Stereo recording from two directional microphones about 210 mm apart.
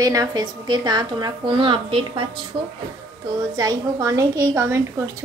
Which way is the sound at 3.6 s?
15° right (ahead or behind).